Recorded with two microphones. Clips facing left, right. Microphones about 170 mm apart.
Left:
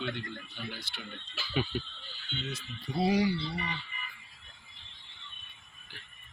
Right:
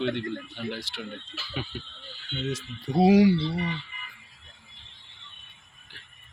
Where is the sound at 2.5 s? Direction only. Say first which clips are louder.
Right 11 dB; 90° right.